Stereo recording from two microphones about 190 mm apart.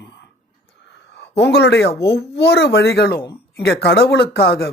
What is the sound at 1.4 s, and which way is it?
Speech, 60° left (ahead or behind).